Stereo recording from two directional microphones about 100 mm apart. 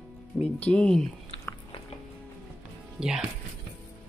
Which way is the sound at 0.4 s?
10° left (ahead or behind).